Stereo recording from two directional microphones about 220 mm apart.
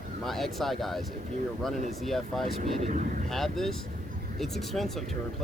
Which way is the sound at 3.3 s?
Centre (ahead or behind).